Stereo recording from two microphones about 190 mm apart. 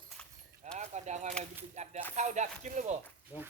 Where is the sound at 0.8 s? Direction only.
35° right (ahead or behind).